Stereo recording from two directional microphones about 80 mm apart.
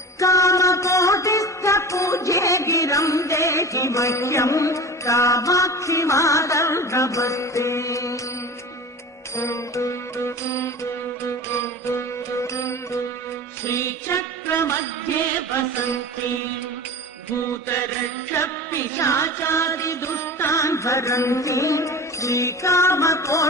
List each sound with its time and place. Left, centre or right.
0.2 s music: left
9.3 s music: left
12.4 s music: left
13.7 s mantra: left
18.3 s music: left